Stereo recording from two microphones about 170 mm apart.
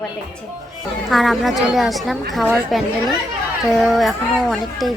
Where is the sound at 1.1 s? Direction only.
Centre (ahead or behind).